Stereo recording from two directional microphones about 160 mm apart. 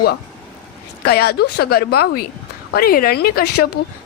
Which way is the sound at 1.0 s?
80° left.